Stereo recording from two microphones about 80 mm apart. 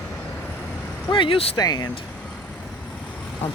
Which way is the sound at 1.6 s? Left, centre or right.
Left.